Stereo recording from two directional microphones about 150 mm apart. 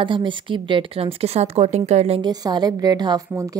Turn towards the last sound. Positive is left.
turn(degrees=-25)  # may be behind; listen again after turning